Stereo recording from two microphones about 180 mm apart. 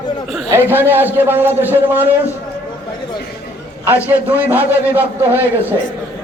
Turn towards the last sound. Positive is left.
turn(degrees=-10)  # may be behind; listen again after turning